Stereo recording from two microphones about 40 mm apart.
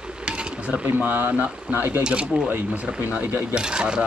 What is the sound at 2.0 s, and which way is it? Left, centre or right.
Speech, right.